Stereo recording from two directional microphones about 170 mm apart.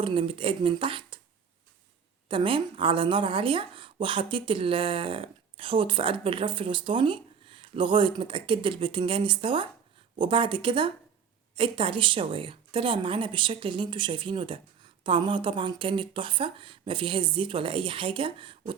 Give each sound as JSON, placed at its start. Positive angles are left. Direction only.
{"t": 0.0, "sound": "a woman's voice", "side_deg": -30}
{"t": 2.3, "sound": "a woman's voice", "side_deg": -30}